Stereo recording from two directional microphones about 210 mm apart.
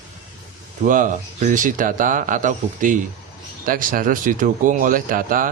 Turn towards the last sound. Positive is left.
turn(degrees=-40)  # may be behind; listen again after turning